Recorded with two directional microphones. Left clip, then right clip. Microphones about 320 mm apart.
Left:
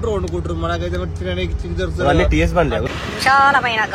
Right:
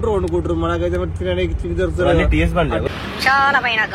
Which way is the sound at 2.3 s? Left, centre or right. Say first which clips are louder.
Left 2 dB; left.